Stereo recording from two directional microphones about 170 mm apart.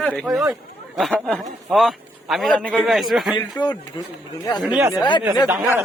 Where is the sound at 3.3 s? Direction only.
25° left (ahead or behind).